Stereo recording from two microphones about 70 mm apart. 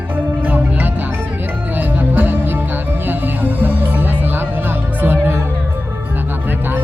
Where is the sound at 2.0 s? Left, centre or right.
Right.